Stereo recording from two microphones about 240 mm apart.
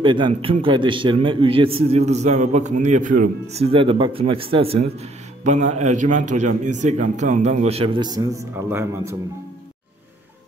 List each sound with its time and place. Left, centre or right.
0.0 s a man's voice: centre